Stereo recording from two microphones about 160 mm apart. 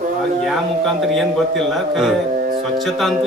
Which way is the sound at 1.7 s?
Centre (ahead or behind).